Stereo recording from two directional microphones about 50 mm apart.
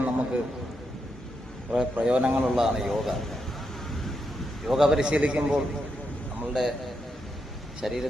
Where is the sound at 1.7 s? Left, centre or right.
Centre.